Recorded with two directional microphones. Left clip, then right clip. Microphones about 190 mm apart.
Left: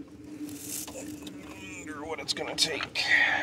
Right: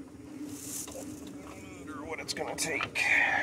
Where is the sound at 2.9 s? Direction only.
30° left (ahead or behind).